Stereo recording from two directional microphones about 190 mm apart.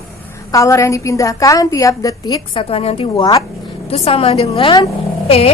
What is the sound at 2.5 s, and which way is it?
A woman's voice, 30° left (ahead or behind).